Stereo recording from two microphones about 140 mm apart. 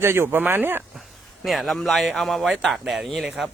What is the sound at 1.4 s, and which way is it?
Speech, centre (ahead or behind).